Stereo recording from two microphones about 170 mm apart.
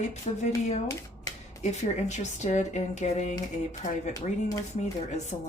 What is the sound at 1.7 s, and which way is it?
Speech, 45° left (ahead or behind).